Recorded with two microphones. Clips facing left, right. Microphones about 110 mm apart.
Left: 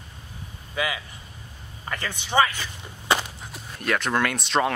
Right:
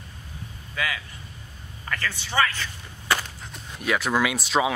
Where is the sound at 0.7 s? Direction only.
20° left (ahead or behind).